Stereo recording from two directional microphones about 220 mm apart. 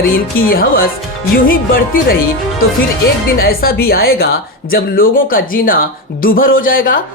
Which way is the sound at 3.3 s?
45° left (ahead or behind).